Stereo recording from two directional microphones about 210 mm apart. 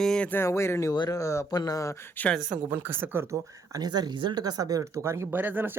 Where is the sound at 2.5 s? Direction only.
10° right (ahead or behind).